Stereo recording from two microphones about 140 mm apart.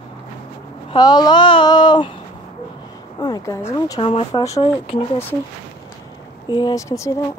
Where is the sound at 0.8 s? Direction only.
30° left (ahead or behind).